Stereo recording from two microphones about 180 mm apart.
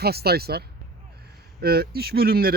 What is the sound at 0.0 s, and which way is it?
Speech, 60° right (ahead or behind).